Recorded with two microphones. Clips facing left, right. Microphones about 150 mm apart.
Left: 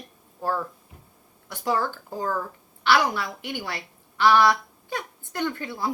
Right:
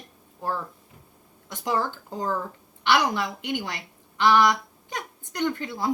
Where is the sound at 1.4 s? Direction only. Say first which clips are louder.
Left 1 dB; 20° right (ahead or behind).